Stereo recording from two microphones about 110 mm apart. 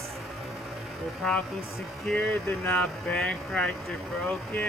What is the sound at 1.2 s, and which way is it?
Speech, 5° left (ahead or behind).